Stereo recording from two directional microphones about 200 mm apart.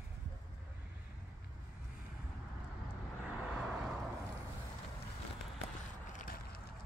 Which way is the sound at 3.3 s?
Centre (ahead or behind).